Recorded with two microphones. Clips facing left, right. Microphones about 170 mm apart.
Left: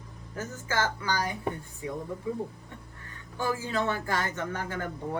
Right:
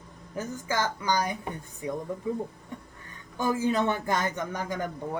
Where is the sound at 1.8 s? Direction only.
20° right (ahead or behind).